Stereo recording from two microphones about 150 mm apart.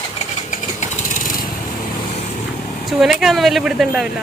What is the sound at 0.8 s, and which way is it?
Lawn mower, 65° left (ahead or behind).